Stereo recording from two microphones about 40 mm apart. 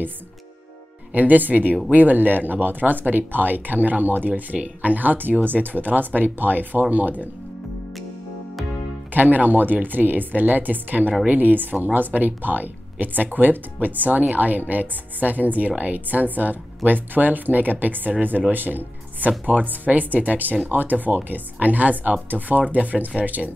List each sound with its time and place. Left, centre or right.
1.1 s speech: right
9.1 s speech: right
22.3 s speech: centre
22.7 s speech: right